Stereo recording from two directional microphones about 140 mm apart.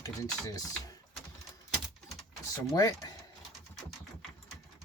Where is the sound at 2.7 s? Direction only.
25° left (ahead or behind).